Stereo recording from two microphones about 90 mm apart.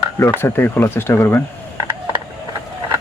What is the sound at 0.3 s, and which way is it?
Speech, 20° left (ahead or behind).